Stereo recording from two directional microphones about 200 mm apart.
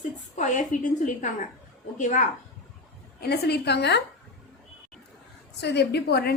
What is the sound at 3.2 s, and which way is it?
Speech, 55° left (ahead or behind).